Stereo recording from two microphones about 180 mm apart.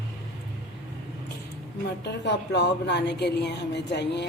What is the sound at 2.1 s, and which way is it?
Speech, 70° left (ahead or behind).